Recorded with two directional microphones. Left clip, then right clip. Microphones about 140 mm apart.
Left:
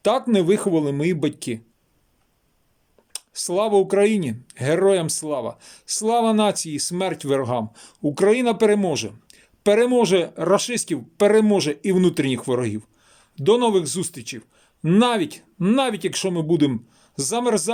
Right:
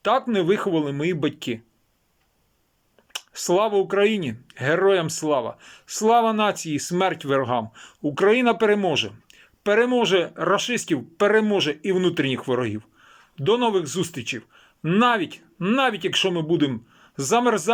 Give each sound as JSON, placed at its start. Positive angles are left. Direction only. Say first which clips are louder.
{"t": 0.0, "sound": "speech", "louder": "left 2 dB", "side_deg": 45}
{"t": 3.1, "sound": "speech", "louder": "right 4 dB", "side_deg": 45}
{"t": 10.4, "sound": "a man's voice", "louder": "left 2 dB", "side_deg": 45}